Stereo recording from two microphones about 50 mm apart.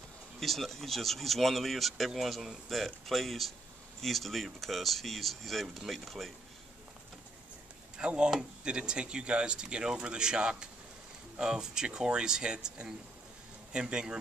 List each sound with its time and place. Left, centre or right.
0.4 s speech: centre
8.0 s speech: centre